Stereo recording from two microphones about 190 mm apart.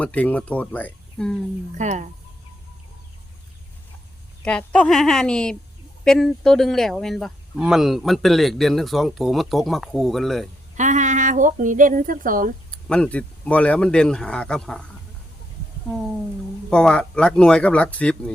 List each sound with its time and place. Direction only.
0.0 s speech: 5° left (ahead or behind)
1.8 s speech: 40° right (ahead or behind)
4.4 s speech: 5° left (ahead or behind)
10.8 s speech: 40° right (ahead or behind)
12.7 s speech: 5° left (ahead or behind)
16.6 s speech: 5° left (ahead or behind)